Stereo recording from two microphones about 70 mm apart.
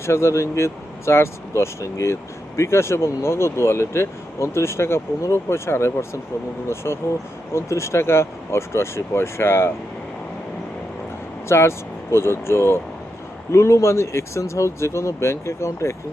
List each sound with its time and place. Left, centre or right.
0.0 s speech: left
11.4 s speech: left